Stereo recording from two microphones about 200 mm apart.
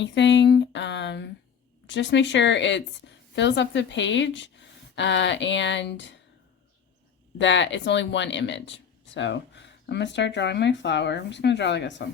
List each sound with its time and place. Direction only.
0.0 s a woman's voice: 60° left (ahead or behind)
7.3 s a woman's voice: 65° left (ahead or behind)